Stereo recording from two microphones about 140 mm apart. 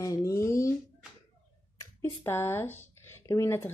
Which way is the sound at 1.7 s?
15° left (ahead or behind).